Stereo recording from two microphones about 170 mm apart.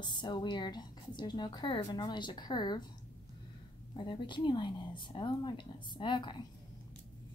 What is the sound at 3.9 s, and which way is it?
A woman's voice, 30° left (ahead or behind).